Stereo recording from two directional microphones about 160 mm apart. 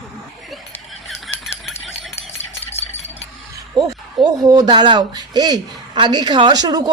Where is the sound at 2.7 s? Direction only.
40° left (ahead or behind).